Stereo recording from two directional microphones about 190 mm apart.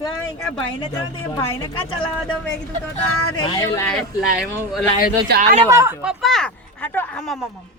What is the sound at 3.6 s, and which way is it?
Speech, 15° left (ahead or behind).